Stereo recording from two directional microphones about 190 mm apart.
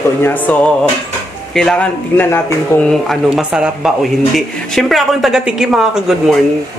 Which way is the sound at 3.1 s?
5° right (ahead or behind).